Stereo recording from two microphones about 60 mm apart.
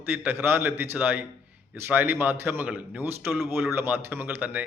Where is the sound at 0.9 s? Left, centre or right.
Right.